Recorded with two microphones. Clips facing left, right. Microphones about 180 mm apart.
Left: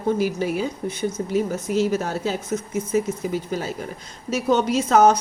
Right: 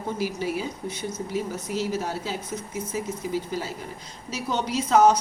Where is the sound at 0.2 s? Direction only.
55° left (ahead or behind).